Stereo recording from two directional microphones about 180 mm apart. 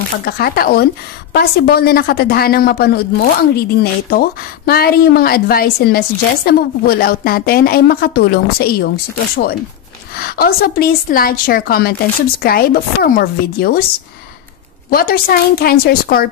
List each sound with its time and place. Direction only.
0.2 s a woman's voice: 60° left (ahead or behind)
10.1 s a woman's voice: 55° left (ahead or behind)
14.9 s a woman's voice: 55° left (ahead or behind)